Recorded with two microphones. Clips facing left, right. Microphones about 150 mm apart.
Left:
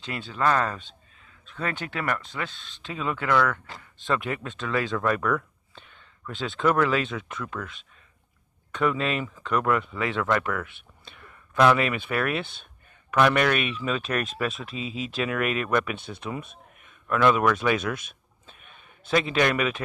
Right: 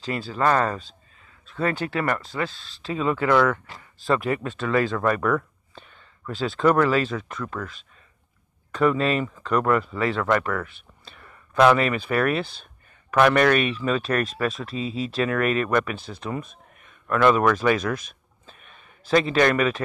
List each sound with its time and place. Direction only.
0.4 s speech: centre (ahead or behind)
1.9 s speech: 5° right (ahead or behind)
2.5 s speech: 40° right (ahead or behind)
2.9 s a man's voice: centre (ahead or behind)
18.5 s a sound: centre (ahead or behind)